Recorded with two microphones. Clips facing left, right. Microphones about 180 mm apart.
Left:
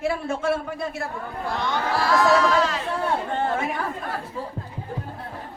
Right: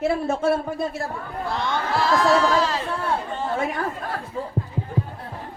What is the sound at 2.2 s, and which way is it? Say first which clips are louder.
Speech: left 1 dB; 30° right (ahead or behind).